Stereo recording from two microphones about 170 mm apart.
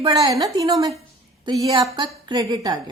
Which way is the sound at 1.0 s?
30° right (ahead or behind).